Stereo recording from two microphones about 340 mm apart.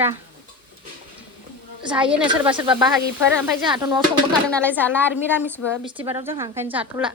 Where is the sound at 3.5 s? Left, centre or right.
Centre.